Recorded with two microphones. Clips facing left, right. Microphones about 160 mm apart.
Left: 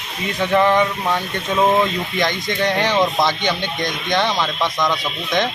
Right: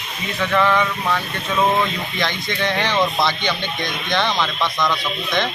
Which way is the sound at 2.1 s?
15° left (ahead or behind).